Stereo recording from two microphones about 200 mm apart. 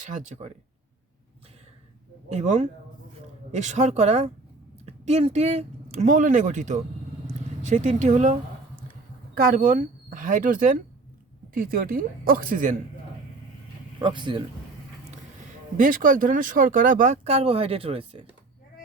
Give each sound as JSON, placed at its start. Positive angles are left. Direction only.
{"t": 0.0, "sound": "speech", "side_deg": -35}
{"t": 2.3, "sound": "speech", "side_deg": -35}
{"t": 14.0, "sound": "speech", "side_deg": -25}
{"t": 15.8, "sound": "speech", "side_deg": -40}